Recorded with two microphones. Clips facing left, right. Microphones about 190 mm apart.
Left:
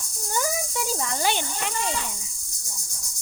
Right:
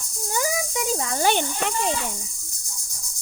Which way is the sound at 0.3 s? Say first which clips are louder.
Right 2 dB; 15° right (ahead or behind).